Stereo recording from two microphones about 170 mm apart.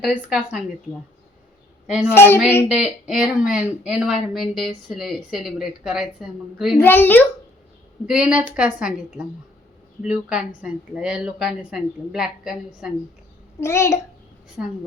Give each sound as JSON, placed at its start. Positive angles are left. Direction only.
{"t": 0.0, "sound": "speech", "side_deg": 0}
{"t": 2.0, "sound": "a woman's voice", "side_deg": 15}
{"t": 2.6, "sound": "speech", "side_deg": -5}
{"t": 6.8, "sound": "a woman's voice", "side_deg": 10}
{"t": 8.0, "sound": "speech", "side_deg": -5}
{"t": 13.6, "sound": "a woman's voice", "side_deg": 15}